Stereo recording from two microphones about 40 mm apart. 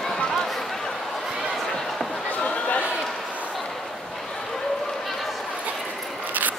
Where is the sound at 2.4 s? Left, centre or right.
Left.